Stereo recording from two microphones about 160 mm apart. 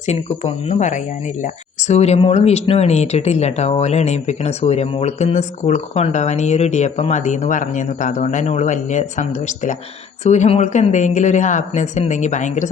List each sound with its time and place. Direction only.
0.0 s speech: 45° left (ahead or behind)